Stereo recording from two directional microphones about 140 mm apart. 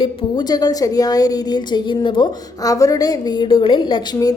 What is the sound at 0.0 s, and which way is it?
A woman's voice, 30° left (ahead or behind).